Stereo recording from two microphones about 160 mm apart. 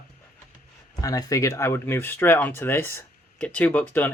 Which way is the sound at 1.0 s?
20° left (ahead or behind).